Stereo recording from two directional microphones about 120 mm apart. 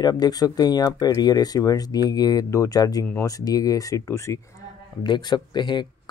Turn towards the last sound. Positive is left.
turn(degrees=40)  # may be behind; listen again after turning